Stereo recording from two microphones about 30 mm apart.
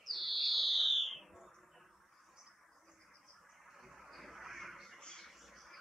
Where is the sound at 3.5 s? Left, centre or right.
Centre.